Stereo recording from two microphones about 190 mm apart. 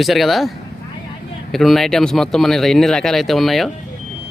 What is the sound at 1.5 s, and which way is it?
A man's voice, centre (ahead or behind).